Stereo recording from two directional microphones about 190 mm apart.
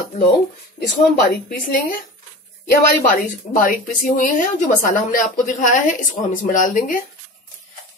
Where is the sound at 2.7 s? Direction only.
45° left (ahead or behind).